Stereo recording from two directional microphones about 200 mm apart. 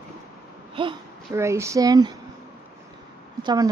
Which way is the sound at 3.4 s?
20° right (ahead or behind).